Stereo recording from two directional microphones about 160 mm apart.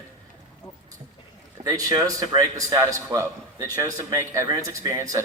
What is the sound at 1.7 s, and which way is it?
Speech, 20° right (ahead or behind).